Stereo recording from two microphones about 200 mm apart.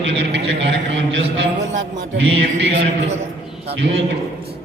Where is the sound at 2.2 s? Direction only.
70° right (ahead or behind).